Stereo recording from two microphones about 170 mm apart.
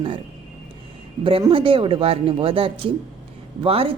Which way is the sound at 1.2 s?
30° right (ahead or behind).